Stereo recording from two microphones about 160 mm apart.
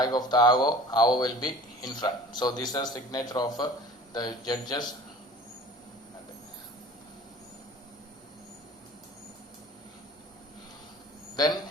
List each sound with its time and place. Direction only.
0.0 s speech: 25° left (ahead or behind)
11.3 s speech: 25° left (ahead or behind)